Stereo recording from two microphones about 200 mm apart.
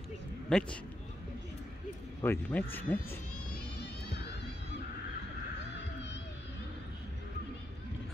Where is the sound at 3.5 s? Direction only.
55° left (ahead or behind).